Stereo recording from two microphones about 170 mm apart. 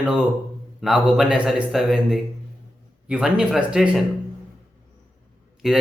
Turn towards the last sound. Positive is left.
turn(degrees=-5)  # may be behind; listen again after turning